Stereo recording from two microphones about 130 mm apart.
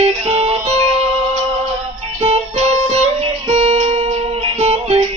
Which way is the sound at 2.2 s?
55° right (ahead or behind).